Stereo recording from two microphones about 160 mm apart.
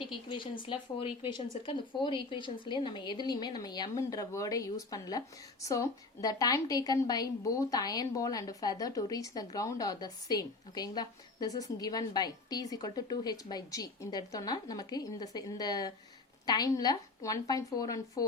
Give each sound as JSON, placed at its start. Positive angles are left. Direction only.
{"t": 0.0, "sound": "a woman's voice", "side_deg": 30}